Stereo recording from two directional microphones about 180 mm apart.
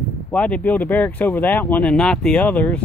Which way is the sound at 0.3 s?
10° left (ahead or behind).